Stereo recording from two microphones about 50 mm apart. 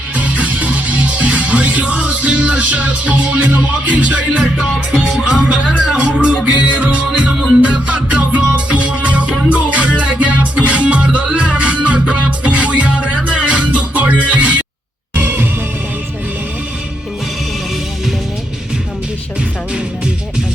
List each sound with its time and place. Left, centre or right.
0.2 s music: right
4.5 s speech: centre
6.0 s music: right
15.1 s music: right